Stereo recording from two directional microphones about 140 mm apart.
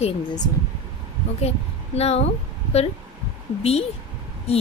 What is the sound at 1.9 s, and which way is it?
Speech, 50° left (ahead or behind).